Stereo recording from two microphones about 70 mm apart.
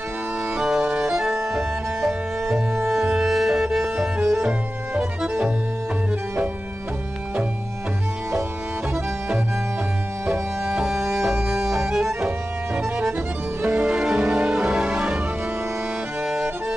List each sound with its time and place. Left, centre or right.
0.6 s music: centre
10.7 s music: centre
13.6 s music: centre
13.8 s music: centre